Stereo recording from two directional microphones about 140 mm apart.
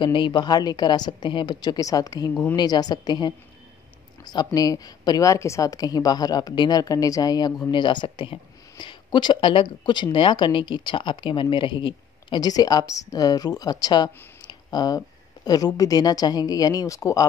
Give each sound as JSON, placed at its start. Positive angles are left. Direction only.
{"t": 0.0, "sound": "a woman's voice", "side_deg": 35}